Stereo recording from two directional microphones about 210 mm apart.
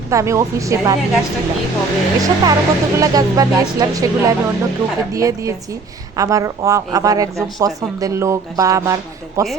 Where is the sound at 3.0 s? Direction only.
15° right (ahead or behind).